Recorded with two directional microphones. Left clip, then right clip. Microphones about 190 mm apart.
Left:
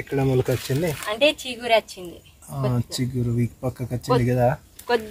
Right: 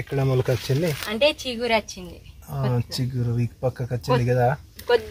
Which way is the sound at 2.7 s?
Centre (ahead or behind).